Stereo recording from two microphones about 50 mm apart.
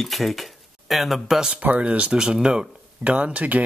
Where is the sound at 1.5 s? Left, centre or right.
Right.